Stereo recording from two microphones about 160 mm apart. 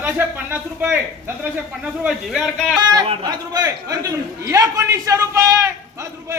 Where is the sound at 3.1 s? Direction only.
25° right (ahead or behind).